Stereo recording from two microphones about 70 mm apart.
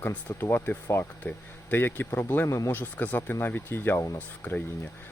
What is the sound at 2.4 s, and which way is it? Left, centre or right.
Speech, left.